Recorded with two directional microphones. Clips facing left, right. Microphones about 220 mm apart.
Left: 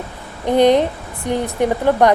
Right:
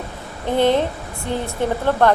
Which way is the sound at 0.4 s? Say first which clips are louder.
Left 4 dB; 15° left (ahead or behind).